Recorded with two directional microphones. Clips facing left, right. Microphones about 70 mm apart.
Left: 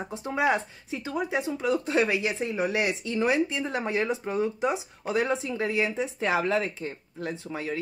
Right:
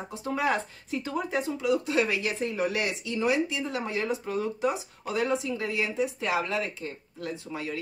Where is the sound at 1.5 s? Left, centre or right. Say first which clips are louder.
Even; left.